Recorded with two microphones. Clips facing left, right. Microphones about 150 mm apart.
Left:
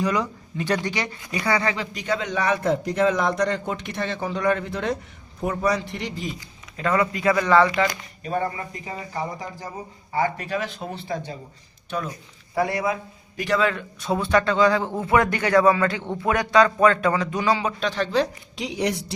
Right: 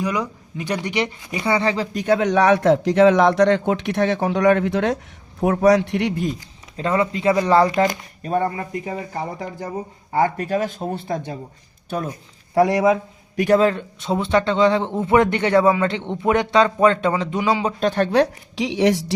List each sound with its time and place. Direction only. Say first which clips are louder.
0.0 s speech: even; 10° right (ahead or behind); by 6.3 s 60° right (ahead or behind)
6.7 s a man's voice: right 2 dB; 25° right (ahead or behind); by 12.1 s 50° right (ahead or behind)
12.5 s a man's voice: right 8 dB; 90° right; by 13.6 s 65° right (ahead or behind)
13.6 s a man's voice: right 5 dB; 30° right (ahead or behind)
17.7 s speech: right 5 dB; 50° right (ahead or behind); by 19.1 s 90° right